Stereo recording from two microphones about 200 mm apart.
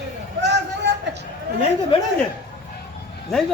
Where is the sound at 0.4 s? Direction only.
60° right (ahead or behind).